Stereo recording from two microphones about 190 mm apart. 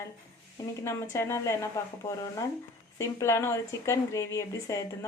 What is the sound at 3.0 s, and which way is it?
A woman's voice, 15° left (ahead or behind).